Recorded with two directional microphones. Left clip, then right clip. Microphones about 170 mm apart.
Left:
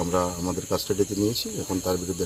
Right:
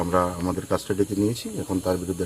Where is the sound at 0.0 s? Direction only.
20° right (ahead or behind).